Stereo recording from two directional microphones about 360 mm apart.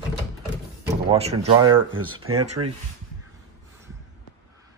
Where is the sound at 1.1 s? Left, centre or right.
Centre.